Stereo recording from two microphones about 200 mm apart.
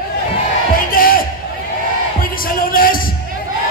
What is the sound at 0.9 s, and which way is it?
Speech, 45° left (ahead or behind).